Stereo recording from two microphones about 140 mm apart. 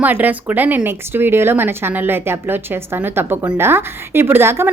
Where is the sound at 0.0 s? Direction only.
10° right (ahead or behind).